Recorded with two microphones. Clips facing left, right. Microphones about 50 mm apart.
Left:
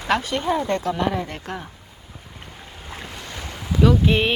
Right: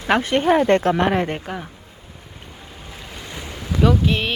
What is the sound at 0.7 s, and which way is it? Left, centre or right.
Speech, right.